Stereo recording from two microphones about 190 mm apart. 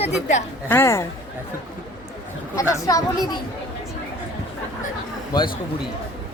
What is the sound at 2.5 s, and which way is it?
Speech, 15° left (ahead or behind).